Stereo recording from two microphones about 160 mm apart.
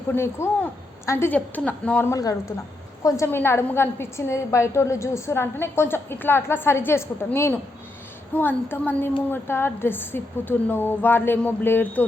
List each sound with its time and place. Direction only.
0.1 s a woman's voice: 15° left (ahead or behind)